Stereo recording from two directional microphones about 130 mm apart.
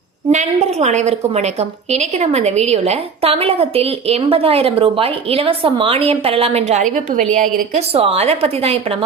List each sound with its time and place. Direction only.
0.3 s a woman's voice: 60° right (ahead or behind); by 7.8 s 85° right
7.8 s a woman's voice: 50° right (ahead or behind)